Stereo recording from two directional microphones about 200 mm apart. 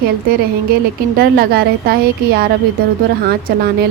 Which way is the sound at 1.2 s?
50° right (ahead or behind).